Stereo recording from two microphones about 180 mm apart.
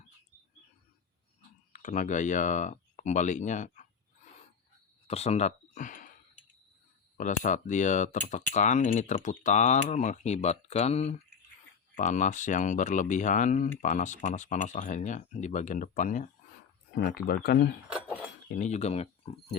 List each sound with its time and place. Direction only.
1.7 s speech: 45° left (ahead or behind)
5.0 s a sound: 35° left (ahead or behind)
7.2 s speech: 45° left (ahead or behind)
16.9 s speech: 65° left (ahead or behind)
18.5 s speech: 40° left (ahead or behind)